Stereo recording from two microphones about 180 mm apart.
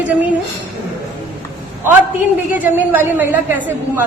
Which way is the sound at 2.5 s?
10° right (ahead or behind).